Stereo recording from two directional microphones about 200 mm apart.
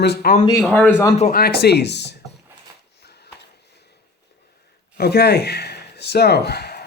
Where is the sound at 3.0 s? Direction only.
55° left (ahead or behind).